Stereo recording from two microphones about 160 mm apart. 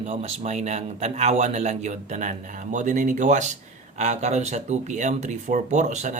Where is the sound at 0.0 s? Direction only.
45° right (ahead or behind).